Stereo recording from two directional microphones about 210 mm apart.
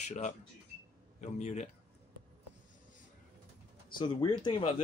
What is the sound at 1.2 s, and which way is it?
Speech, 35° left (ahead or behind).